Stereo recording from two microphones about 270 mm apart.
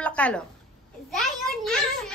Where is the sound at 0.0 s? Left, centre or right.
Centre.